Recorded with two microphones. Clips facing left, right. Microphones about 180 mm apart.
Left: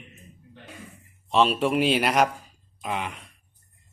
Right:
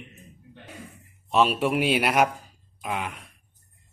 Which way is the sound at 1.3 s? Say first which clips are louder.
Even; 5° right (ahead or behind).